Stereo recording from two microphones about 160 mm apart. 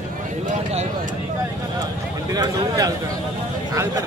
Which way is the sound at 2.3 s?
20° right (ahead or behind).